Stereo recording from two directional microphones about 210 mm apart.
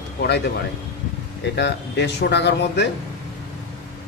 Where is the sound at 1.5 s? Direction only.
55° left (ahead or behind).